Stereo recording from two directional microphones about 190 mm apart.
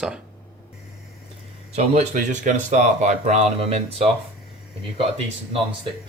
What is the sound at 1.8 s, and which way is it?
Speech, 35° right (ahead or behind).